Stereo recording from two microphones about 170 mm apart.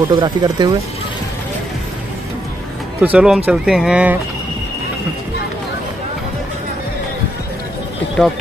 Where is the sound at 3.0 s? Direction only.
10° right (ahead or behind).